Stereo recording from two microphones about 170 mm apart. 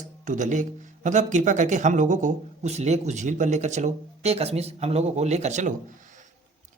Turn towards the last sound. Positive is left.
turn(degrees=-50)  # may be behind; listen again after turning